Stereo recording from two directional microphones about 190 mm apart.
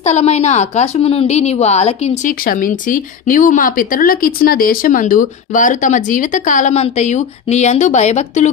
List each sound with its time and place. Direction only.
0.0 s a woman's voice: 35° left (ahead or behind)
2.4 s speech: 45° left (ahead or behind)